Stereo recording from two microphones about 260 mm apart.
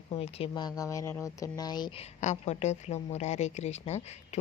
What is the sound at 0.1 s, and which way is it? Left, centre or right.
Speech, left.